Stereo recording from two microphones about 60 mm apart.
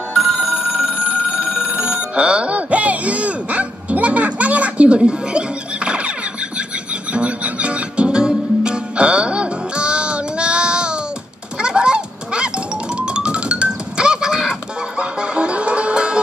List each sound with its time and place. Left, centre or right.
0.1 s telephone bell ringing: centre
1.2 s telephone bell ringing: left
1.7 s speech: centre
5.9 s squeal: centre
7.1 s music: right
11.6 s a sound: centre
12.9 s music: centre